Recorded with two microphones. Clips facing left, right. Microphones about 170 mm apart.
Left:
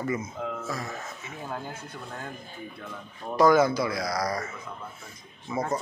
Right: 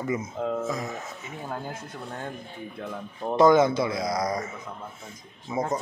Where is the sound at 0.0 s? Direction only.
20° right (ahead or behind).